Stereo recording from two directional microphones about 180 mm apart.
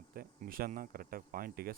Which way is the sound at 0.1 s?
55° right (ahead or behind).